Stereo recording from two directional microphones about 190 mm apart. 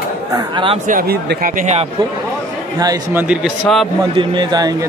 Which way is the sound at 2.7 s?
15° right (ahead or behind).